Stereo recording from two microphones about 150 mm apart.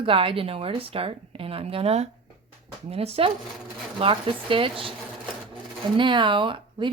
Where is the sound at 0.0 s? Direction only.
35° right (ahead or behind).